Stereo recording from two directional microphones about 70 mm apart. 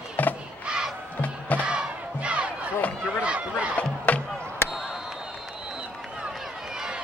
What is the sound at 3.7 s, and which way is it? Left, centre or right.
Music, centre.